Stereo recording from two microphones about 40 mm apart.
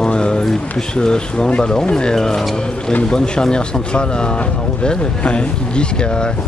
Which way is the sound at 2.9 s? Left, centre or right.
Left.